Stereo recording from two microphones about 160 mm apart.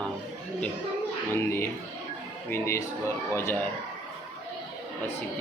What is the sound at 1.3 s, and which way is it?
Speech, 15° left (ahead or behind).